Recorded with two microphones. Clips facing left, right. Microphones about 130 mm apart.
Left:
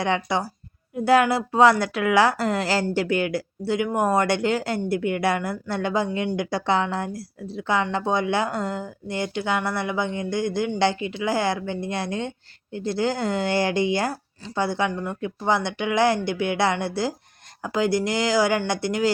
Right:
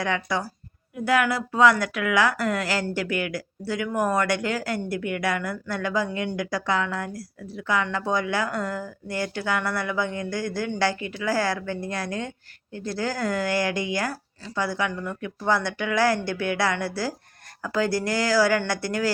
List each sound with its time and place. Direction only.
0.0 s a woman's voice: 25° left (ahead or behind)